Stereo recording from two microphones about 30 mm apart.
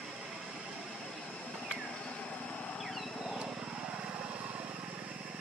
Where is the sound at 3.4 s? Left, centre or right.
Right.